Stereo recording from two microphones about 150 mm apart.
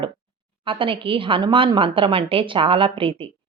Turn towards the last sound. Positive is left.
turn(degrees=-35)  # may be behind; listen again after turning